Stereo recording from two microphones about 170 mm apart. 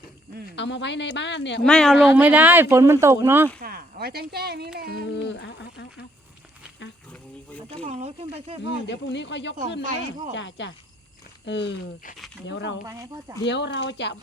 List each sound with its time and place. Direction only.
0.5 s a woman's voice: 90° left
1.6 s speech: 5° left (ahead or behind)
2.1 s speech: 10° right (ahead or behind)
3.6 s speech: 60° right (ahead or behind)
5.1 s speech: 90° left
7.9 s speech: 40° right (ahead or behind)
8.6 s a woman's voice: 90° left
12.9 s speech: 20° right (ahead or behind)
13.4 s a woman's voice: 90° left